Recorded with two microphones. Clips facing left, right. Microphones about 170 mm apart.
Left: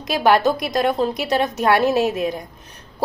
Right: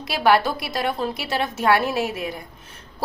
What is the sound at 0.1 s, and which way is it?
A woman's voice, 20° left (ahead or behind).